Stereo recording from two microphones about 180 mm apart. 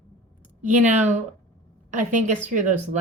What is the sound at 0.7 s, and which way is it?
A woman's voice, 40° right (ahead or behind).